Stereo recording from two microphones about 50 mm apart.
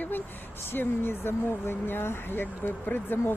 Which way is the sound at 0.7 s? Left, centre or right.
Left.